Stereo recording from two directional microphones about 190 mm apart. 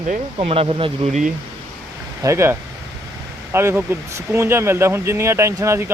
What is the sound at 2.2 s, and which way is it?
Speech, 15° right (ahead or behind).